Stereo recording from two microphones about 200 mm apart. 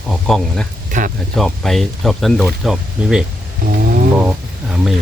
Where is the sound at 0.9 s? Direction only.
40° right (ahead or behind).